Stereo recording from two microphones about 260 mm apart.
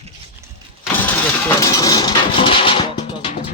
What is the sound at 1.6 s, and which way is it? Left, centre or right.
Music, centre.